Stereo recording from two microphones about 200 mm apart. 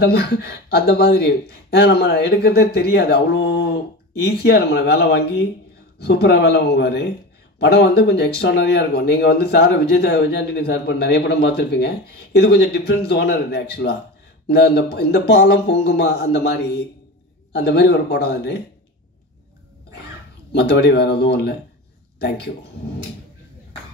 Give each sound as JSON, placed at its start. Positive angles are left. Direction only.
{"t": 0.0, "sound": "speech", "side_deg": 55}
{"t": 20.5, "sound": "speech", "side_deg": 55}